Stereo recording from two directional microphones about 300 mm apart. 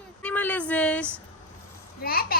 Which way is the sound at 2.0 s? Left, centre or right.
Left.